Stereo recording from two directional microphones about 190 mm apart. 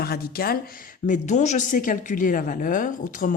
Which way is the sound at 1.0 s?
40° left (ahead or behind).